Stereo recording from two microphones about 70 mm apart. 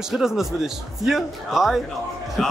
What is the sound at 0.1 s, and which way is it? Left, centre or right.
Speech, centre.